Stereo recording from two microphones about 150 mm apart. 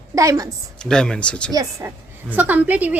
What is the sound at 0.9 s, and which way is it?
Speech, 5° left (ahead or behind).